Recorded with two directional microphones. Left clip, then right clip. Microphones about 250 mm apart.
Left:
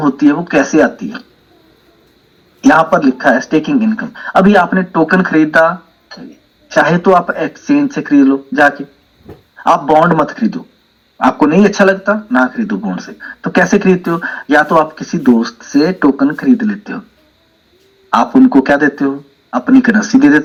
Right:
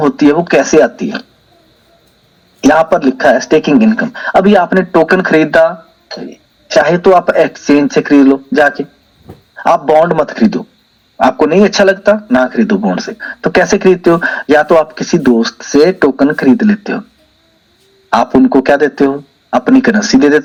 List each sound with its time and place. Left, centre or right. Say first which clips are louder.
0.0 s a man's voice: right 3 dB; right
2.6 s a man's voice: right 1 dB; right
18.1 s a man's voice: right 1 dB; right